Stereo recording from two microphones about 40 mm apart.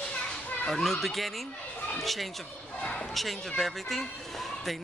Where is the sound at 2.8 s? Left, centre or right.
Left.